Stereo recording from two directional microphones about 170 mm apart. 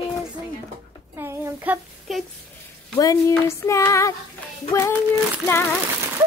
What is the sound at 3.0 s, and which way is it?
Child singing, 20° left (ahead or behind).